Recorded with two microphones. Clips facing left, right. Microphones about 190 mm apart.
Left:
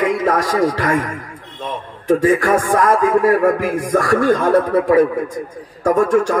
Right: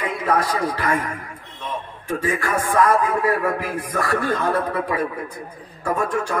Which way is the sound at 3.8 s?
45° left (ahead or behind).